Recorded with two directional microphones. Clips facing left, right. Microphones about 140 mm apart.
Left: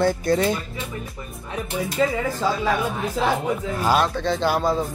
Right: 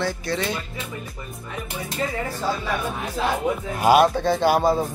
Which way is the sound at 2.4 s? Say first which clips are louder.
Left 2 dB; 90° left.